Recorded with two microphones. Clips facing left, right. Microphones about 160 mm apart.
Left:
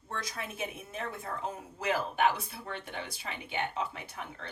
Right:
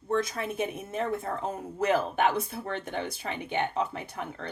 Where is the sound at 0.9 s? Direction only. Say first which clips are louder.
Right 11 dB; 45° right (ahead or behind).